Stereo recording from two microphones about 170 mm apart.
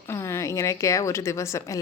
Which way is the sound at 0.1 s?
15° left (ahead or behind).